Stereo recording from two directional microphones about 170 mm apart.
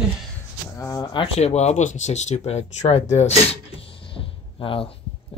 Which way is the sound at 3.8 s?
30° left (ahead or behind).